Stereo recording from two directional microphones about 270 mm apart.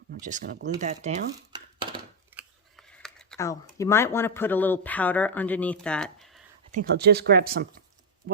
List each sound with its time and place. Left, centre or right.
0.1 s speech: right
1.5 s a sound: centre
2.3 s speech: centre
6.7 s speech: right